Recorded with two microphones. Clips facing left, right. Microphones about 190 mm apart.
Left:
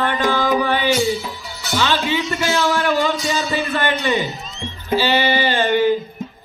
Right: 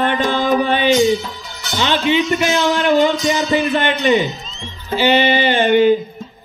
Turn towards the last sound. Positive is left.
turn(degrees=-20)  # may be behind; listen again after turning